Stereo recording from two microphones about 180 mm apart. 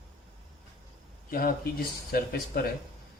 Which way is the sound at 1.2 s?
55° left (ahead or behind).